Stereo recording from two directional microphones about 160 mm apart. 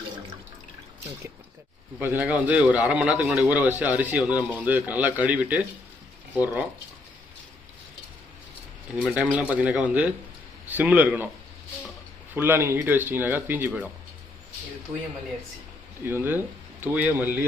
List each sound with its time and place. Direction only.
2.0 s a man's voice: 10° right (ahead or behind)
9.0 s a man's voice: 10° right (ahead or behind)
12.3 s a man's voice: 15° right (ahead or behind)
16.0 s a man's voice: 15° right (ahead or behind)